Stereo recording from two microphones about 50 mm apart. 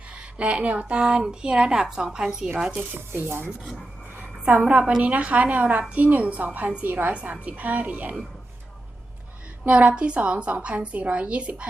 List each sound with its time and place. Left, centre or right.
0.2 s a woman's voice: right
2.9 s speech: right
5.0 s a woman's voice: right
9.6 s a woman's voice: right